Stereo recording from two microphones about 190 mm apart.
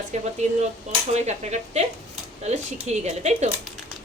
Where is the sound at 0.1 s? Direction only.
40° right (ahead or behind).